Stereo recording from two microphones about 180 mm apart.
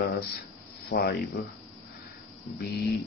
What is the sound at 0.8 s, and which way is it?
Speech, 60° left (ahead or behind).